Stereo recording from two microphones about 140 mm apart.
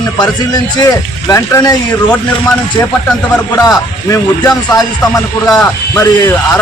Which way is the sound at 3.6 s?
25° left (ahead or behind).